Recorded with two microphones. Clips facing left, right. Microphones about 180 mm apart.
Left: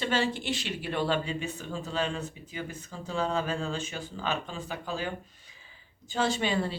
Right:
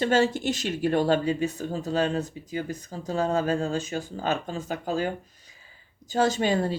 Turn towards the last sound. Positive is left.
turn(degrees=-45)  # may be behind; listen again after turning